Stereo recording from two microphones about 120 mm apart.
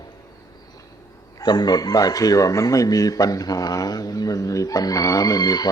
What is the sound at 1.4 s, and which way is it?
Speech, 35° left (ahead or behind).